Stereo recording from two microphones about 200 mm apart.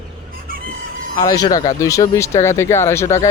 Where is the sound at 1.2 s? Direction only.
20° left (ahead or behind).